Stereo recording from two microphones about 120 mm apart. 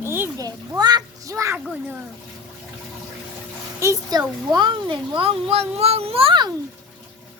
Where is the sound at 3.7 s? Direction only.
25° right (ahead or behind).